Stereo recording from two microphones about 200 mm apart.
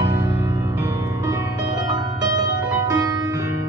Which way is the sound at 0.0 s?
15° right (ahead or behind).